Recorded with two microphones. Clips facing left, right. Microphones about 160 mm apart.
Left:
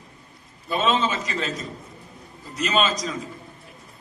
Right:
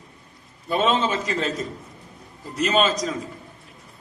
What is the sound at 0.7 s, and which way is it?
Speech, 50° right (ahead or behind).